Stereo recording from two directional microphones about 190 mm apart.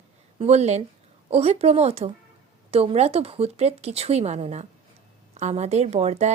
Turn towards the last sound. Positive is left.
turn(degrees=-35)  # may be behind; listen again after turning